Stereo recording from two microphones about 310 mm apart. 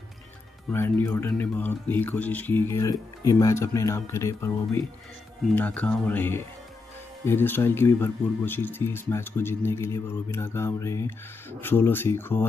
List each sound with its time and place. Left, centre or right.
0.7 s speech: centre
5.6 s speech: centre